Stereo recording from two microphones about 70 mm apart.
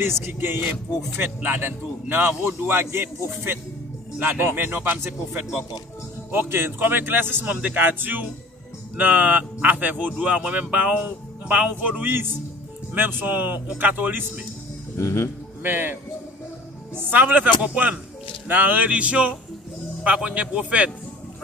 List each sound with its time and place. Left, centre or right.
0.0 s speech: right
15.0 s speech: left
15.6 s speech: right